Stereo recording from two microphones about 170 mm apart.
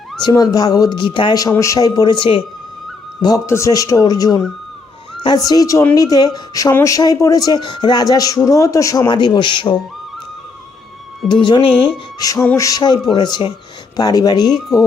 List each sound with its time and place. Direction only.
0.2 s a woman's voice: 25° left (ahead or behind)
11.3 s a woman's voice: 25° left (ahead or behind)